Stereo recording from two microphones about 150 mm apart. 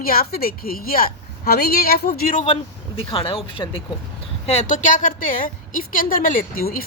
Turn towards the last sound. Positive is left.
turn(degrees=75)  # may be behind; listen again after turning